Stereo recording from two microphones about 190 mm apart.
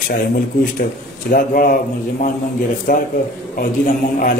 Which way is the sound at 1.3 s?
45° left (ahead or behind).